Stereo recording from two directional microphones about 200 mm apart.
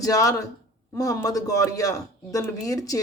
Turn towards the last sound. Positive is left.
turn(degrees=15)  # may be behind; listen again after turning